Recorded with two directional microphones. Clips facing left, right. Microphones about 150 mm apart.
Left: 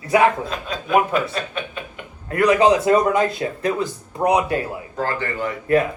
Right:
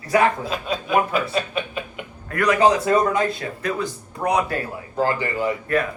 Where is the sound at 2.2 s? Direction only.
25° left (ahead or behind).